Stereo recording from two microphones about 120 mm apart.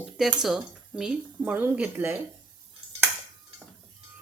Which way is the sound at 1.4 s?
20° right (ahead or behind).